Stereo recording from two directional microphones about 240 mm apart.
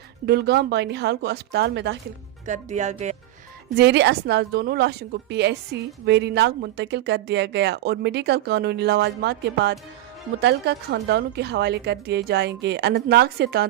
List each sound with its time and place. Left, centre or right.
0.3 s a woman's voice: right
2.5 s speech: right
3.8 s a woman's voice: right